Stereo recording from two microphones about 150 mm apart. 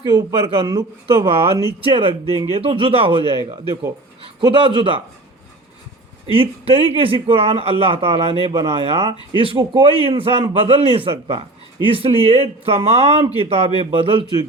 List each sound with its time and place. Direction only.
0.0 s a man's voice: 25° right (ahead or behind)
6.3 s a man's voice: 40° right (ahead or behind)